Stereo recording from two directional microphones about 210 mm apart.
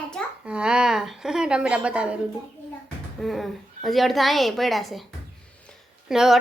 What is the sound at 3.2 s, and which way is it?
A woman's voice, centre (ahead or behind).